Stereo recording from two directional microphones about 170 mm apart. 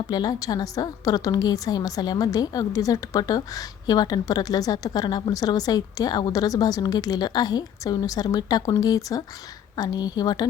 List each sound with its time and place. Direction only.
0.1 s a woman's voice: 25° left (ahead or behind)